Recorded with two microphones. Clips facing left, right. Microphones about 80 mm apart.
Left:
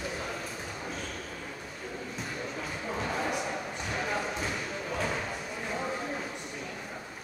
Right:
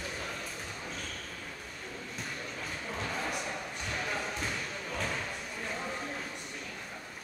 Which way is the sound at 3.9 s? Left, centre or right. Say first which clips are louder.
Left 4 dB; centre.